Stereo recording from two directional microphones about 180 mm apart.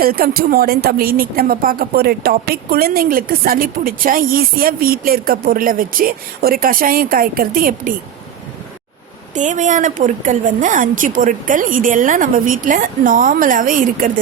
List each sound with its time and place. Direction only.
0.0 s speech: 55° right (ahead or behind)
9.3 s speech: 45° right (ahead or behind)